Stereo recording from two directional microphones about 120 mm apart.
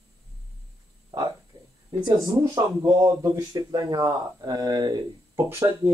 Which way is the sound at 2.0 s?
25° right (ahead or behind).